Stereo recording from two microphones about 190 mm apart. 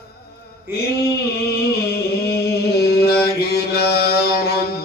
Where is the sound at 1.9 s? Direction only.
55° left (ahead or behind).